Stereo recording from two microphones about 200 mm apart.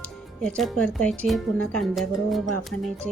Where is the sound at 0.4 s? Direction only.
5° left (ahead or behind).